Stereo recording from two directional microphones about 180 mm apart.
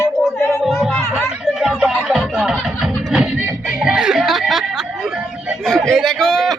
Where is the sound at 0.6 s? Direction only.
Centre (ahead or behind).